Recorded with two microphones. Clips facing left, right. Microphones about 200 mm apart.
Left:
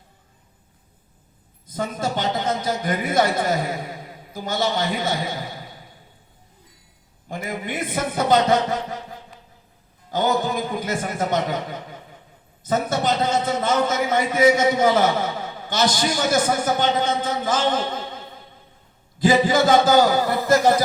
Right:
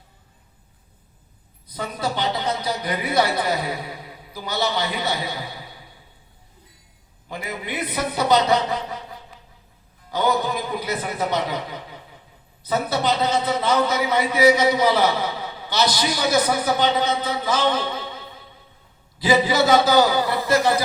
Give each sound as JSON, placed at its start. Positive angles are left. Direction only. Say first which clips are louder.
{"t": 1.6, "sound": "a man's voice", "louder": "left 1 dB", "side_deg": 45}
{"t": 7.3, "sound": "a man's voice", "louder": "left 2 dB", "side_deg": 50}